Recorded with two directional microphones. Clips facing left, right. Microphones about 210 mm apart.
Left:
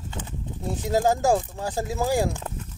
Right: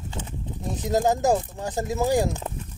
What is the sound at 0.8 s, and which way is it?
Speech, 20° right (ahead or behind).